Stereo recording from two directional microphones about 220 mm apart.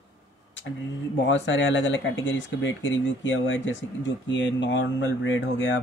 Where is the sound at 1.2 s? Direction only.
55° left (ahead or behind).